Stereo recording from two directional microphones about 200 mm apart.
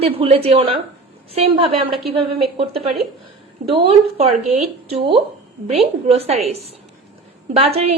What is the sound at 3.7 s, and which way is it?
A woman's voice, 30° right (ahead or behind).